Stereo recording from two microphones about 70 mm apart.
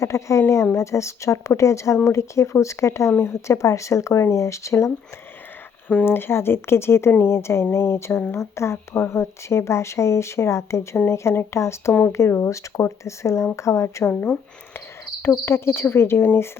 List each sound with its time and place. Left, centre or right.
0.0 s a woman's voice: left
6.1 s a woman's voice: left